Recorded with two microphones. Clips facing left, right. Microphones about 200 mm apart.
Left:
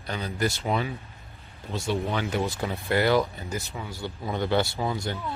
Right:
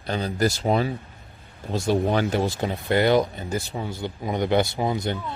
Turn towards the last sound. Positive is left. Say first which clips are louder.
# right 4 dB
turn(degrees=-20)  # may be behind; listen again after turning